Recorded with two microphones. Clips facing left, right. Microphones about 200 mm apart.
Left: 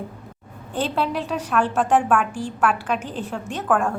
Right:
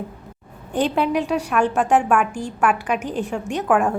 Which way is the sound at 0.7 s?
15° right (ahead or behind).